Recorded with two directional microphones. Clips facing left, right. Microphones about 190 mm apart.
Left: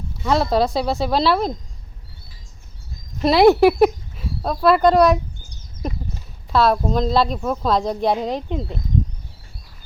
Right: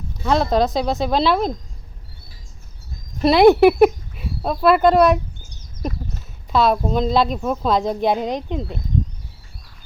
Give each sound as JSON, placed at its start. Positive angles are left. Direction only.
{"t": 0.2, "sound": "a woman's voice", "side_deg": 0}
{"t": 3.2, "sound": "a woman's voice", "side_deg": 0}
{"t": 6.5, "sound": "a woman's voice", "side_deg": 0}